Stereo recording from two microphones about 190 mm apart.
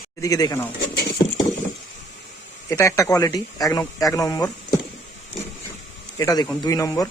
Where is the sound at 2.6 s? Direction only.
15° left (ahead or behind).